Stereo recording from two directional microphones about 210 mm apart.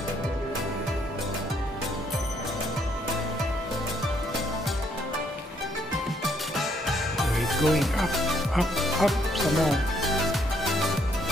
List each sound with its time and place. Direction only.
6.2 s music: centre (ahead or behind)